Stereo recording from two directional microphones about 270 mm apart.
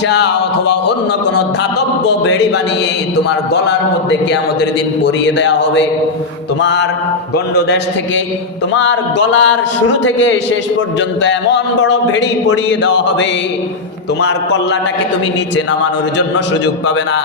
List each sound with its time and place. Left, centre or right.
3.2 s a man's voice: left